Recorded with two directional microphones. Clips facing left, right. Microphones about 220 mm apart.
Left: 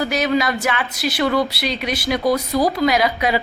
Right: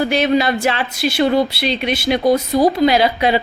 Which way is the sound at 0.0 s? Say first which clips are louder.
Right 4 dB; 30° right (ahead or behind).